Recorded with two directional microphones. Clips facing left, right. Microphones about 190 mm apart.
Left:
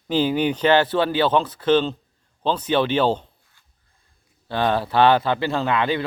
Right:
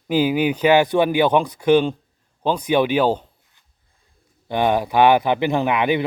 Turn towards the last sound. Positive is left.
turn(degrees=-15)  # may be behind; listen again after turning